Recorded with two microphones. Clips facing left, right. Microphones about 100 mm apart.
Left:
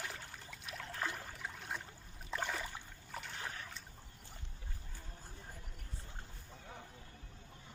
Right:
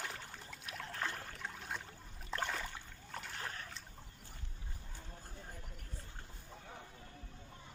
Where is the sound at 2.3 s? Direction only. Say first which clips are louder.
Even; centre (ahead or behind).